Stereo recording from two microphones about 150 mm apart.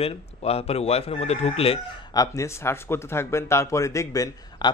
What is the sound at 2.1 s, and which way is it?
Speech, 20° left (ahead or behind).